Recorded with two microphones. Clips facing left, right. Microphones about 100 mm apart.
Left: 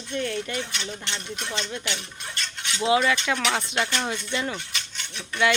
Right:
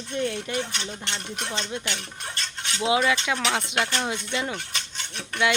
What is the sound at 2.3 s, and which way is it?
Cutlery, 35° right (ahead or behind).